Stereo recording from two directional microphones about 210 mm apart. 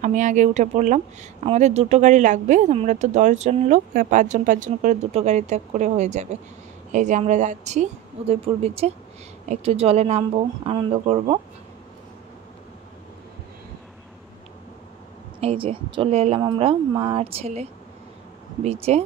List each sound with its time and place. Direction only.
0.0 s speech: 35° right (ahead or behind)
15.4 s speech: 25° right (ahead or behind)